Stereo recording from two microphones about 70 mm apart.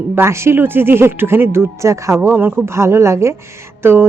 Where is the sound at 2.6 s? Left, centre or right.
Right.